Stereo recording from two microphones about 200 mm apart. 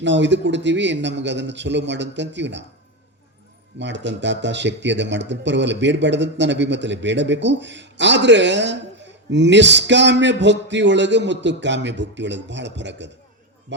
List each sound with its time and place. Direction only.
0.0 s speech: 60° right (ahead or behind)
3.8 s speech: 60° right (ahead or behind)